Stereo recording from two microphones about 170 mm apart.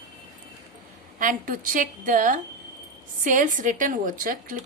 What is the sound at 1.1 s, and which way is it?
A woman's voice, 55° right (ahead or behind).